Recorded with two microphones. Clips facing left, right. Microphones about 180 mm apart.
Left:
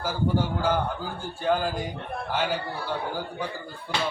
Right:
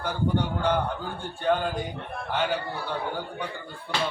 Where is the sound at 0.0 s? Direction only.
5° left (ahead or behind).